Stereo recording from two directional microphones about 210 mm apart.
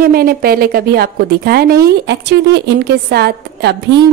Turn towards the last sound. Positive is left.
turn(degrees=-50)  # may be behind; listen again after turning